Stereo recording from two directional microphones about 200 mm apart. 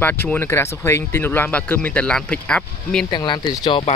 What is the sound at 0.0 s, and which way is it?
Speech, 10° left (ahead or behind).